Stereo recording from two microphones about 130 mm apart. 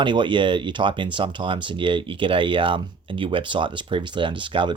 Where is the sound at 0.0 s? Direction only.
40° right (ahead or behind).